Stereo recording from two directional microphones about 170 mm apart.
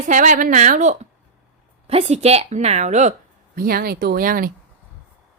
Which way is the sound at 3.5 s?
60° right (ahead or behind).